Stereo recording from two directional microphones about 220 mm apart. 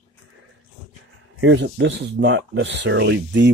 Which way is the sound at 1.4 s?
55° right (ahead or behind).